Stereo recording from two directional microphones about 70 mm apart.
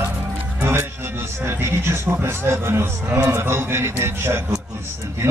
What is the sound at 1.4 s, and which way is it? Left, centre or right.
A man's voice, right.